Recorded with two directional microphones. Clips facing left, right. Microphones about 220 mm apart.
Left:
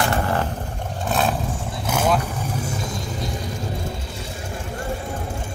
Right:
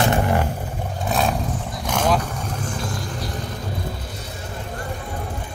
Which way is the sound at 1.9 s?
5° left (ahead or behind).